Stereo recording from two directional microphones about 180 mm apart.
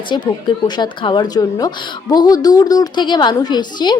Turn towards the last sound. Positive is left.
turn(degrees=25)  # may be behind; listen again after turning